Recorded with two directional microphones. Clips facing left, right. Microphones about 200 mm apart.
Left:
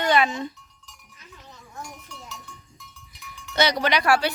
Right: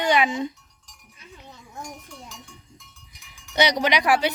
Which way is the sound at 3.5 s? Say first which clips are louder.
Right 1 dB; 15° right (ahead or behind).